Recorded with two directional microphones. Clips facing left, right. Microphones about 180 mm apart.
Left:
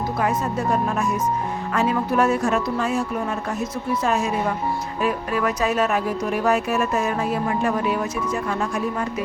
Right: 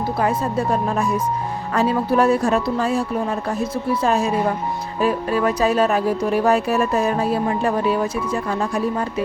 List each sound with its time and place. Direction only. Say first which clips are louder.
0.2 s speech: right 3 dB; 30° right (ahead or behind)
1.7 s speech: right 3 dB; 35° right (ahead or behind)
4.0 s speech: right 3 dB; 35° right (ahead or behind)